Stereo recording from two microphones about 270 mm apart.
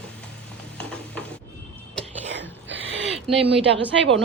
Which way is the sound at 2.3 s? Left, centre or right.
Right.